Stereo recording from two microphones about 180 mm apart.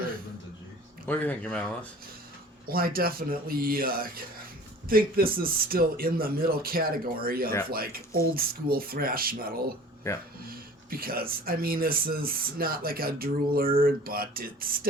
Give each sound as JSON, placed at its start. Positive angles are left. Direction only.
{"t": 1.0, "sound": "speech", "side_deg": 10}
{"t": 2.6, "sound": "speech", "side_deg": -55}
{"t": 10.0, "sound": "speech", "side_deg": 15}
{"t": 10.4, "sound": "speech", "side_deg": -55}